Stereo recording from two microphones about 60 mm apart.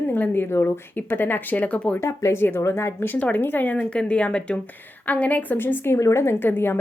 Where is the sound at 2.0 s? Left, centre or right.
Left.